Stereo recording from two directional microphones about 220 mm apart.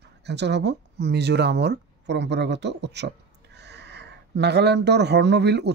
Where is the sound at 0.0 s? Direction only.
50° right (ahead or behind).